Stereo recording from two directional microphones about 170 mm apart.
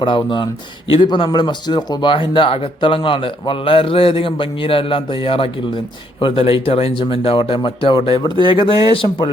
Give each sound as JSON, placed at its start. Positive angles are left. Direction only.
{"t": 0.0, "sound": "speech", "side_deg": 30}